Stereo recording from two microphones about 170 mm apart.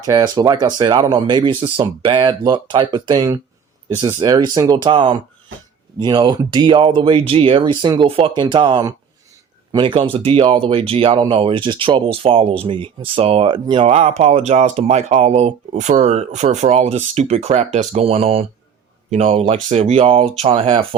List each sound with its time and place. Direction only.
0.0 s speech: 25° right (ahead or behind)